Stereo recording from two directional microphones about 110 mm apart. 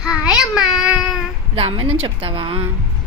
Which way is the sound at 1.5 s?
55° right (ahead or behind).